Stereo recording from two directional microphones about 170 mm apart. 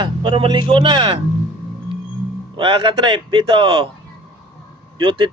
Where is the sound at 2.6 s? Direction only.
30° right (ahead or behind).